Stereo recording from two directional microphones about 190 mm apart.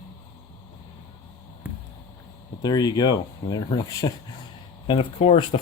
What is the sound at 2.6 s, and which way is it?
Speech, 20° left (ahead or behind).